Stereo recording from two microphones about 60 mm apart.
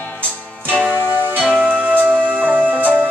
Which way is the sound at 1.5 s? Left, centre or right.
Right.